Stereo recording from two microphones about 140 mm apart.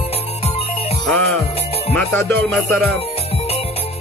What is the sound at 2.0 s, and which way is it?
Music, 15° left (ahead or behind).